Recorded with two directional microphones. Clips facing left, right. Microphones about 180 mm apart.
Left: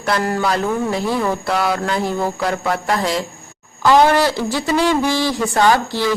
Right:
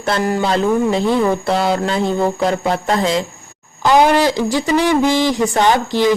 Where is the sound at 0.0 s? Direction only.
25° right (ahead or behind).